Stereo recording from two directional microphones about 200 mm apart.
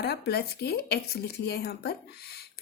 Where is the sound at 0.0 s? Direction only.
50° left (ahead or behind).